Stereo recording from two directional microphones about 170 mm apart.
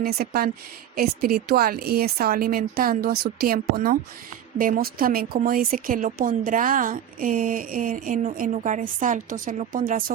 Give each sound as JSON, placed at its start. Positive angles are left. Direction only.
{"t": 0.0, "sound": "a woman's voice", "side_deg": -65}